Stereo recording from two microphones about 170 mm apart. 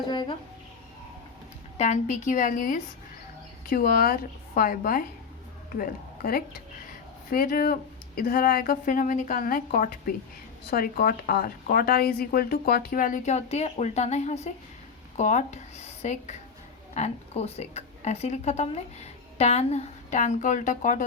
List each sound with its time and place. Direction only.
0.1 s speech: 25° left (ahead or behind)
1.8 s a woman's voice: 45° left (ahead or behind)